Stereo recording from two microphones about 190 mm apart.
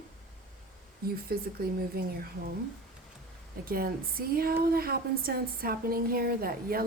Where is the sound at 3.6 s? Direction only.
50° right (ahead or behind).